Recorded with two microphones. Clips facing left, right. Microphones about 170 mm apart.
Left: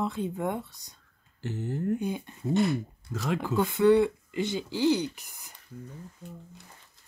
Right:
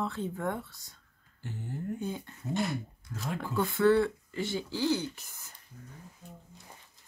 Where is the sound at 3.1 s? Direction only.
90° left.